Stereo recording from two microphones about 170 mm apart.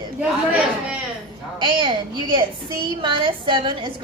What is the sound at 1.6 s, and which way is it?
A woman's voice, 30° right (ahead or behind).